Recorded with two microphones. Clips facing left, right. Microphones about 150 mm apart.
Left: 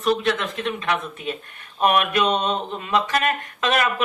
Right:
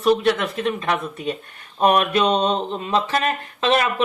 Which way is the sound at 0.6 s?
35° right (ahead or behind).